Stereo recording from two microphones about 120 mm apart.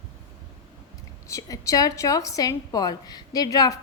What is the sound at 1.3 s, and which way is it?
A woman's voice, 25° left (ahead or behind).